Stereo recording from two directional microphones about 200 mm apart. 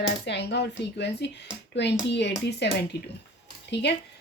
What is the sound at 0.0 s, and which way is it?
Speech, 60° left (ahead or behind).